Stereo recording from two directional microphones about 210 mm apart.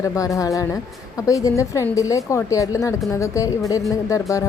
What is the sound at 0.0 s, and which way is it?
A woman's voice, 15° left (ahead or behind).